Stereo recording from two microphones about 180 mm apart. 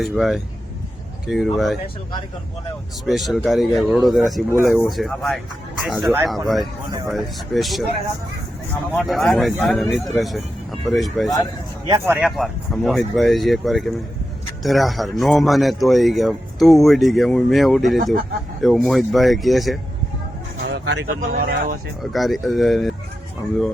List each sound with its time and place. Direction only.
0.0 s speech: centre (ahead or behind)
3.1 s speech: centre (ahead or behind)
8.9 s speech: centre (ahead or behind)
11.9 s speech: 15° right (ahead or behind)
12.4 s speech: centre (ahead or behind)
20.6 s vehicle: 80° right
21.2 s speech: 55° right (ahead or behind)
22.0 s speech: centre (ahead or behind)